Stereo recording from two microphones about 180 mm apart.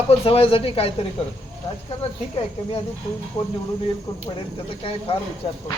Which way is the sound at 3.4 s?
25° left (ahead or behind).